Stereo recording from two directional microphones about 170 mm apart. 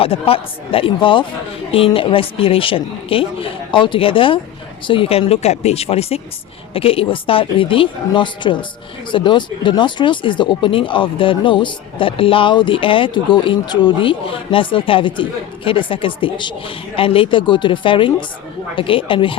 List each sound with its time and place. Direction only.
0.0 s speech: 35° left (ahead or behind)